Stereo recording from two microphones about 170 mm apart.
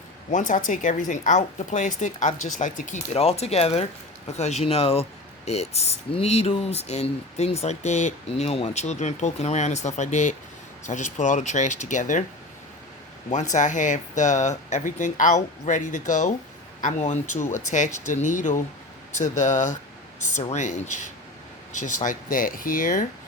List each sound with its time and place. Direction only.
0.3 s speech: 50° left (ahead or behind)
13.3 s speech: 45° left (ahead or behind)